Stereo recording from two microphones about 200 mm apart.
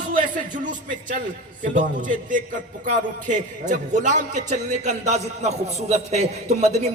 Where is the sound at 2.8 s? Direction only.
40° right (ahead or behind).